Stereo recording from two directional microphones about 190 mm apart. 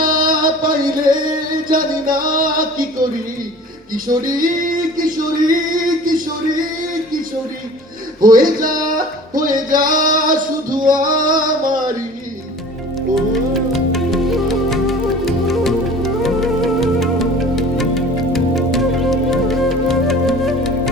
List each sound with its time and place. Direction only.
0.0 s music: 45° right (ahead or behind)
1.7 s male singing: 45° right (ahead or behind)
4.4 s male singing: 45° right (ahead or behind)
8.2 s male singing: 45° right (ahead or behind)
13.7 s music: centre (ahead or behind)